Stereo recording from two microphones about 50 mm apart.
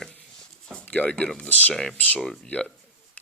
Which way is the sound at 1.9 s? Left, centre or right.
Left.